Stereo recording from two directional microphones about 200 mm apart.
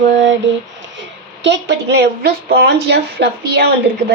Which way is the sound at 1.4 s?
60° right (ahead or behind).